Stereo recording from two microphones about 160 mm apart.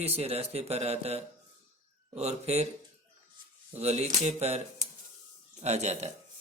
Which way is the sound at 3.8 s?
45° right (ahead or behind).